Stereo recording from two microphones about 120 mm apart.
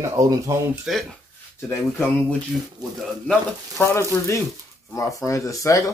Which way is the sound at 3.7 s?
25° left (ahead or behind).